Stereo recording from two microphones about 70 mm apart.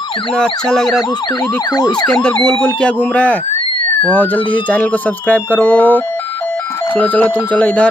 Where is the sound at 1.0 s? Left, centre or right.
Left.